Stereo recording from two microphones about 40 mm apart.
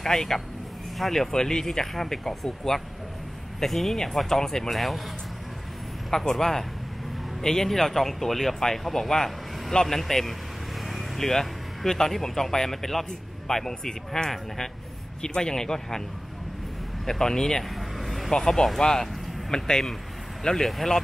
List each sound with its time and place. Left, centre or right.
0.0 s speech: centre
6.0 s speech: centre
17.0 s speech: centre
17.7 s vehicle: centre
18.3 s speech: centre